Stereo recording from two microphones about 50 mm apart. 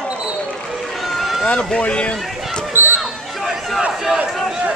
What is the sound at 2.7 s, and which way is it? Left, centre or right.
Basketball bounce, right.